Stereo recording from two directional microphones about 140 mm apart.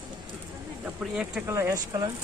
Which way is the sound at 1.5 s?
25° right (ahead or behind).